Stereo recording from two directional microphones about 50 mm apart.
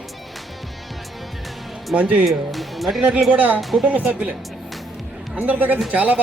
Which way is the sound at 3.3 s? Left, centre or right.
Right.